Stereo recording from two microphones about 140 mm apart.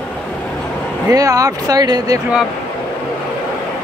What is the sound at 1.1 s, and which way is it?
Speech, 25° right (ahead or behind).